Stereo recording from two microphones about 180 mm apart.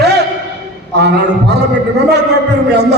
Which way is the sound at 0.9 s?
65° right (ahead or behind).